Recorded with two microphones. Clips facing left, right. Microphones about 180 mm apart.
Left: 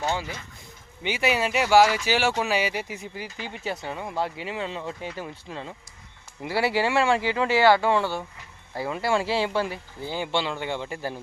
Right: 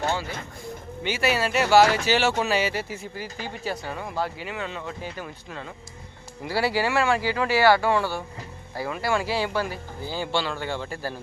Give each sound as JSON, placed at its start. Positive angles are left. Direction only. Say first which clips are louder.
{"t": 1.0, "sound": "speech", "louder": "even", "side_deg": 15}